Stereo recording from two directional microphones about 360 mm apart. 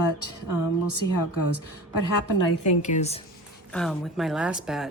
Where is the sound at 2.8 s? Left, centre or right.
Centre.